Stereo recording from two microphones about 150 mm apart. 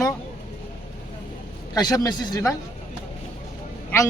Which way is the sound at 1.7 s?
25° left (ahead or behind).